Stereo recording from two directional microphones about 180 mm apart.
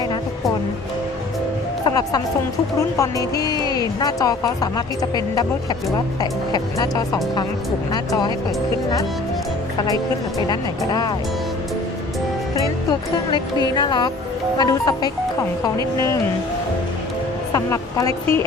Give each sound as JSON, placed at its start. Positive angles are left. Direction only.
{"t": 1.8, "sound": "music", "side_deg": 20}
{"t": 2.7, "sound": "speech", "side_deg": 20}
{"t": 6.5, "sound": "speech", "side_deg": 20}
{"t": 10.3, "sound": "speech", "side_deg": 25}
{"t": 12.5, "sound": "music", "side_deg": 25}
{"t": 13.7, "sound": "speech", "side_deg": 25}
{"t": 17.5, "sound": "a woman's voice", "side_deg": 15}